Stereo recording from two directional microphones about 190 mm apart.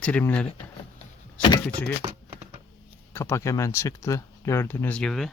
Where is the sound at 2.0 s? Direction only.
30° right (ahead or behind).